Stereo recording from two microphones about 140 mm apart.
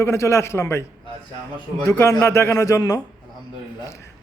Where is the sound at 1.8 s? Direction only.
20° left (ahead or behind).